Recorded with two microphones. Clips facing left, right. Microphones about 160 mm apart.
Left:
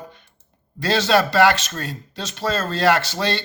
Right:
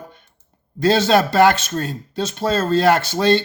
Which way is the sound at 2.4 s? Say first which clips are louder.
Right 3 dB; 30° right (ahead or behind).